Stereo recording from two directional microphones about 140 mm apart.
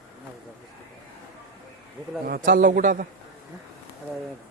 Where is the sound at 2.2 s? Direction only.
90° right.